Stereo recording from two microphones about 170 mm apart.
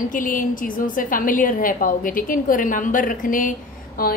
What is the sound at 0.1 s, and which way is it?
A woman's voice, 50° left (ahead or behind).